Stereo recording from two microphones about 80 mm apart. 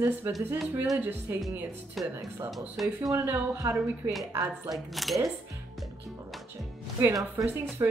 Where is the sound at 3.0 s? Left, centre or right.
Right.